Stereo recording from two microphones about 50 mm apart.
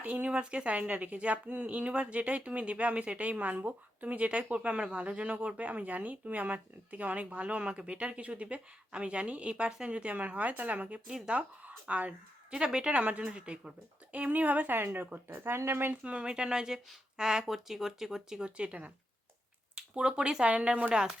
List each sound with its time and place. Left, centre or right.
0.0 s speech: right
12.5 s a woman's voice: centre; by 14.8 s right
14.8 s speech: right
15.9 s a woman's voice: right